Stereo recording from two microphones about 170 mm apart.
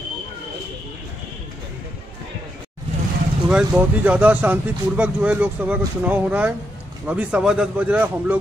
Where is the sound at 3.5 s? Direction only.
5° right (ahead or behind).